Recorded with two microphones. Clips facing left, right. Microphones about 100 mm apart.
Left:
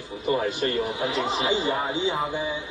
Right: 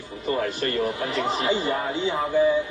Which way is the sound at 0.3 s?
20° left (ahead or behind).